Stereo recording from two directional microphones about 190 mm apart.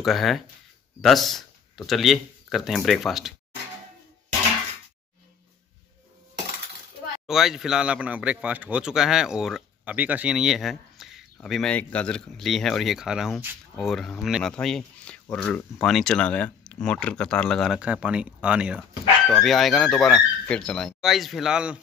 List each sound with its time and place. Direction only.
0.0 s speech: centre (ahead or behind)
7.2 s speech: centre (ahead or behind)